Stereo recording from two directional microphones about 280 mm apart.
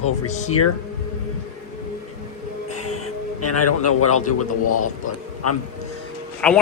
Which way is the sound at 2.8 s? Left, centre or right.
Left.